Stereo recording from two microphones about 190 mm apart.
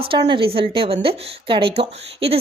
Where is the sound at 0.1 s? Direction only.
25° right (ahead or behind).